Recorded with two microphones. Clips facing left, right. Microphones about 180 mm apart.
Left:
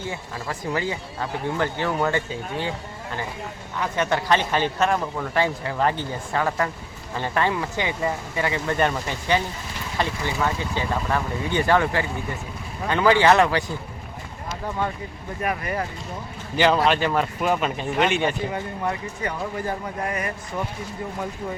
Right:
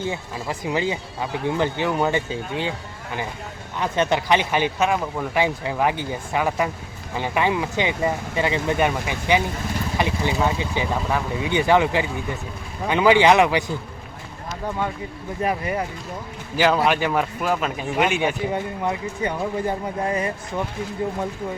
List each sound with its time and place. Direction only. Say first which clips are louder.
0.0 s speech: right 4 dB; 20° right (ahead or behind)
3.8 s speech: right 2 dB; 20° right (ahead or behind)
8.8 s speech: right 1 dB; 10° right (ahead or behind)
15.4 s speech: right 3 dB; 20° right (ahead or behind)
16.6 s speech: even; 5° right (ahead or behind)
18.5 s speech: right 2 dB; 20° right (ahead or behind)